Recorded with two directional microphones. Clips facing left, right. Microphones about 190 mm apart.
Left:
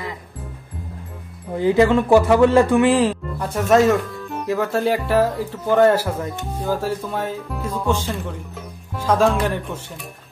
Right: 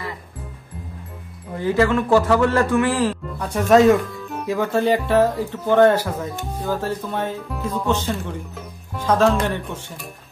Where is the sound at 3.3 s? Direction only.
Centre (ahead or behind).